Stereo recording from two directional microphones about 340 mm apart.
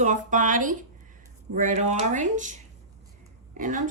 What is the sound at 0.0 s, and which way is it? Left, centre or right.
A woman's voice, right.